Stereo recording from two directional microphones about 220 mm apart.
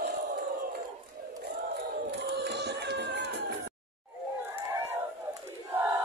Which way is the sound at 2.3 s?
50° right (ahead or behind).